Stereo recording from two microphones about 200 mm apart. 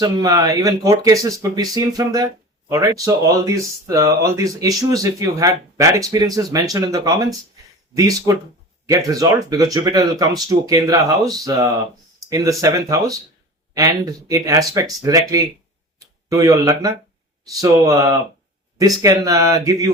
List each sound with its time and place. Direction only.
0.0 s speech: 20° right (ahead or behind)